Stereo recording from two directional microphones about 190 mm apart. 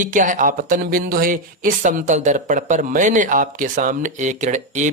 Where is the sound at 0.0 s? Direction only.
45° right (ahead or behind).